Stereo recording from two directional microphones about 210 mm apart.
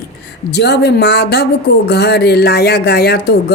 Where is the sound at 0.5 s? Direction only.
50° left (ahead or behind).